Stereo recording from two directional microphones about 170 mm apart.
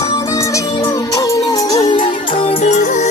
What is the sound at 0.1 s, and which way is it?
Music, 20° left (ahead or behind).